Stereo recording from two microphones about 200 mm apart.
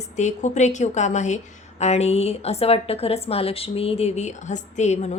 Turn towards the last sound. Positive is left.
turn(degrees=35)  # may be behind; listen again after turning